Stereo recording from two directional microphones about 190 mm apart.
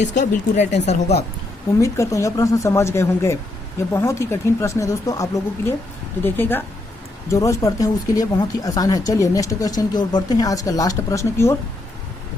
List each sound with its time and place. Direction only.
0.1 s speech: 40° left (ahead or behind)
1.8 s speech: 15° left (ahead or behind)